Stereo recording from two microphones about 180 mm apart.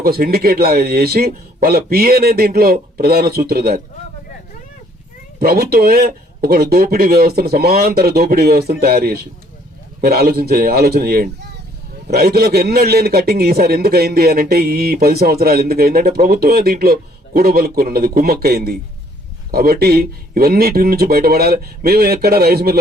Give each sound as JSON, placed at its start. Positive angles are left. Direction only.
{"t": 0.0, "sound": "a man's voice", "side_deg": -55}
{"t": 5.4, "sound": "a man's voice", "side_deg": -60}